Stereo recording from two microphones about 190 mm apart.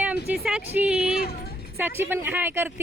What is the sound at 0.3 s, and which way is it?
Speech, 5° right (ahead or behind).